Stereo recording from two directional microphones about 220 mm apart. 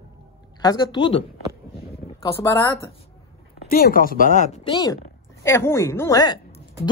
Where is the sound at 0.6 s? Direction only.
20° left (ahead or behind).